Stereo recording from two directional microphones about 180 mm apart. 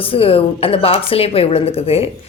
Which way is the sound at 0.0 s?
30° left (ahead or behind).